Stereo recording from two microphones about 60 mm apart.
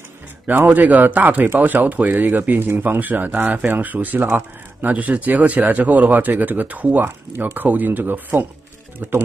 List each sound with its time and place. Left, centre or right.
0.7 s speech: right